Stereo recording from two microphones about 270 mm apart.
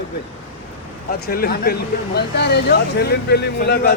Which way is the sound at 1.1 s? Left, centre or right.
Left.